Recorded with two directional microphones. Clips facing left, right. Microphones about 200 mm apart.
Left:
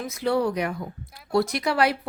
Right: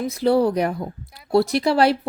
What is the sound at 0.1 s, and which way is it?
A woman's voice, 35° right (ahead or behind).